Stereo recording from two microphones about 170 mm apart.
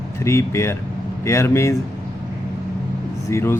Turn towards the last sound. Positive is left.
turn(degrees=15)  # may be behind; listen again after turning